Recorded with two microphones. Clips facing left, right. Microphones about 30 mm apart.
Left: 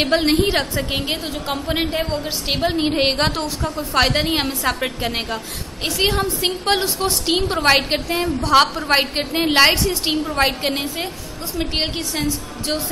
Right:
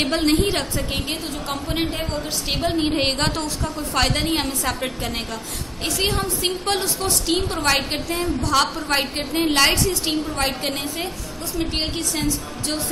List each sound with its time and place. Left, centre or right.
0.0 s a woman's voice: left
7.5 s a woman's voice: left